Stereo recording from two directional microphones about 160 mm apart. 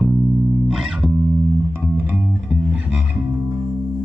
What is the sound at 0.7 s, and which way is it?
Music, 5° right (ahead or behind).